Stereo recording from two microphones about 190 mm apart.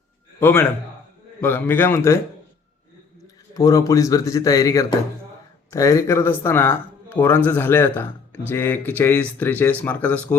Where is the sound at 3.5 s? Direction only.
20° left (ahead or behind).